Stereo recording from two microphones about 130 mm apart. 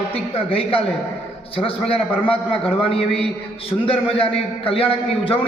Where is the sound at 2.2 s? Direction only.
45° left (ahead or behind).